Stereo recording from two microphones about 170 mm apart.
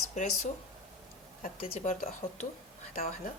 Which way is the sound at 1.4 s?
50° left (ahead or behind).